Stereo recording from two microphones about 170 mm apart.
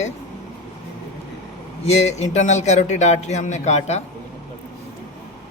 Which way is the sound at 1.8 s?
40° left (ahead or behind).